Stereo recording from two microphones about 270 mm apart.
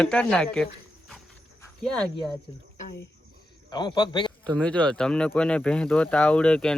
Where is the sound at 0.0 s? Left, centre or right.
Centre.